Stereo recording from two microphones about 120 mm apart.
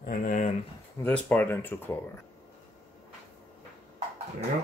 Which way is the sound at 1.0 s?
15° left (ahead or behind).